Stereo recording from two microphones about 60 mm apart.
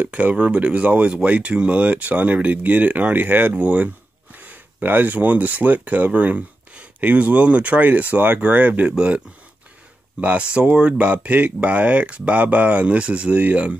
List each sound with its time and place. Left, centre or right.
0.0 s speech: right
10.2 s speech: right